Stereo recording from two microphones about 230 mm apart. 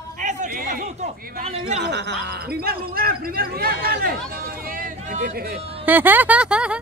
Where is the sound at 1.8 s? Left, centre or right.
Right.